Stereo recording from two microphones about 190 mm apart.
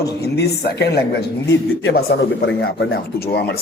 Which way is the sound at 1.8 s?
75° left (ahead or behind).